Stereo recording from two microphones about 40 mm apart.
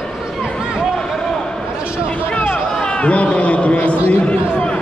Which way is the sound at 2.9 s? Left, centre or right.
Left.